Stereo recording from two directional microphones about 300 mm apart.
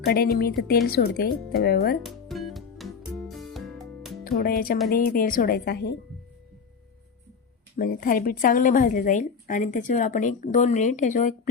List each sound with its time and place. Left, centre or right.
0.0 s speech: left
2.0 s music: centre
4.2 s a woman's voice: left
7.8 s a woman's voice: left